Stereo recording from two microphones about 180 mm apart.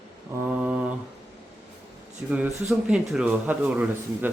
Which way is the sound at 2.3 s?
5° right (ahead or behind).